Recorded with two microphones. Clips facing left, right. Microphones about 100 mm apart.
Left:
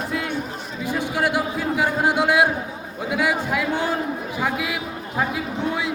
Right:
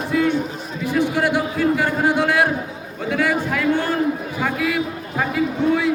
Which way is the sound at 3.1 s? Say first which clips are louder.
Right 2 dB; 10° left (ahead or behind).